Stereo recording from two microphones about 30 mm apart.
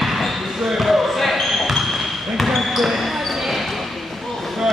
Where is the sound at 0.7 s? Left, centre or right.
Centre.